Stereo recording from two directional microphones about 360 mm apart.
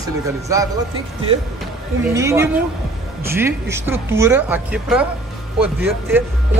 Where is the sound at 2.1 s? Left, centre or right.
Centre.